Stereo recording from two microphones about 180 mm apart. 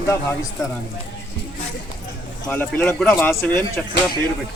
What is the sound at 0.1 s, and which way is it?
Speech, 15° left (ahead or behind).